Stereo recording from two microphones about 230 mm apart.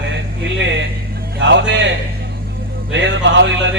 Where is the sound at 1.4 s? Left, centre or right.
Right.